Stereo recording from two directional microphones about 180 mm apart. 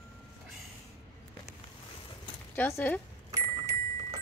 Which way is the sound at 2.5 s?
10° left (ahead or behind).